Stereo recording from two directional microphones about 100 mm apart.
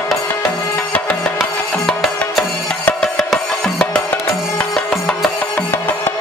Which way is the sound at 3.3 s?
10° left (ahead or behind).